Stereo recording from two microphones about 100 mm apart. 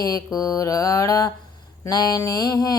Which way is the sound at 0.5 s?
35° left (ahead or behind).